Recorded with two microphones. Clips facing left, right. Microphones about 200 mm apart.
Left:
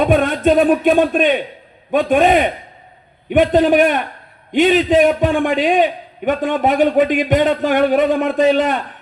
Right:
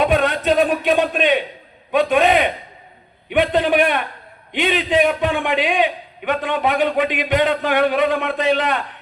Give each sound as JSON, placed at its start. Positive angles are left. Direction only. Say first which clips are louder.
{"t": 0.0, "sound": "a man's voice", "louder": "left 3 dB", "side_deg": 50}